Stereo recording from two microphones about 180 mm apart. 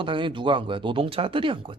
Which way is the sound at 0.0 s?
25° right (ahead or behind).